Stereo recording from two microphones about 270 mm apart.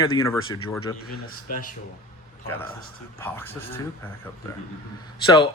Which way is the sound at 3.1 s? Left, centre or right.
Centre.